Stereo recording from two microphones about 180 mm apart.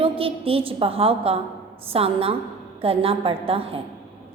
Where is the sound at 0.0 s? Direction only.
30° right (ahead or behind).